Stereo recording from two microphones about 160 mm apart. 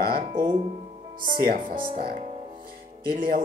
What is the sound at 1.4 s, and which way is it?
Speech, 65° right (ahead or behind).